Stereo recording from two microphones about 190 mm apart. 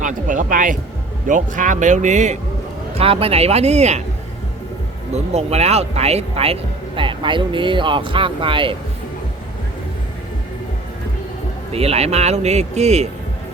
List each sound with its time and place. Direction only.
0.0 s speech: 40° right (ahead or behind)
5.1 s speech: 35° right (ahead or behind)
11.7 s speech: 30° right (ahead or behind)